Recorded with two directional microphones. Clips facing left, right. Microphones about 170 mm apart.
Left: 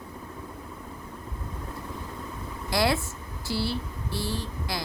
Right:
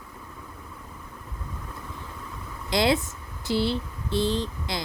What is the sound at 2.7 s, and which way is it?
Speech, 20° right (ahead or behind).